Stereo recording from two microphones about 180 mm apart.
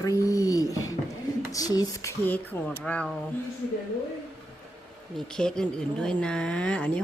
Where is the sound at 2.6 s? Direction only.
5° left (ahead or behind).